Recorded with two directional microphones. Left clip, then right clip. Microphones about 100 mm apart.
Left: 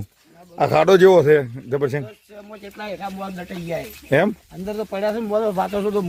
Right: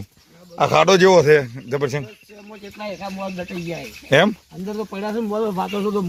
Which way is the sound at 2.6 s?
10° left (ahead or behind).